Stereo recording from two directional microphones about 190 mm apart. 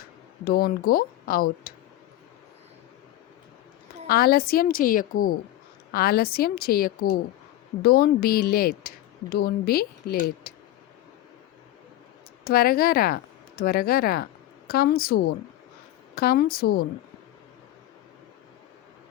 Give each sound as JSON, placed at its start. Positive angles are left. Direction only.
{"t": 0.4, "sound": "a woman's voice", "side_deg": 50}
{"t": 4.0, "sound": "a woman's voice", "side_deg": 50}
{"t": 12.5, "sound": "a woman's voice", "side_deg": 55}